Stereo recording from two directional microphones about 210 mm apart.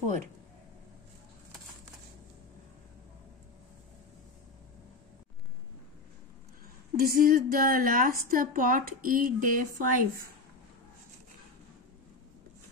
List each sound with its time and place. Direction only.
7.0 s a woman's voice: 45° right (ahead or behind)